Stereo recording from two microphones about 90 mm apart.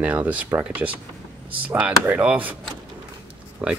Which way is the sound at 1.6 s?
15° right (ahead or behind).